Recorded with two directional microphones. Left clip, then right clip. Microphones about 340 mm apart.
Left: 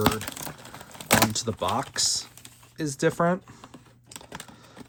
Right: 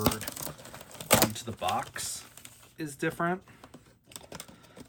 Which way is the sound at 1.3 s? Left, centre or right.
Centre.